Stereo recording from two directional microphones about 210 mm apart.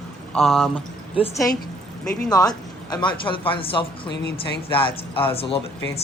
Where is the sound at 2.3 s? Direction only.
20° left (ahead or behind).